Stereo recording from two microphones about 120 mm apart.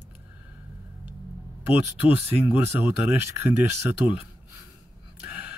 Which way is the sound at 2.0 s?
15° right (ahead or behind).